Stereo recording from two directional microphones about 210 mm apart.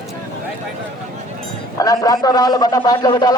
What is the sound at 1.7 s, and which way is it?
A man's voice, 15° left (ahead or behind).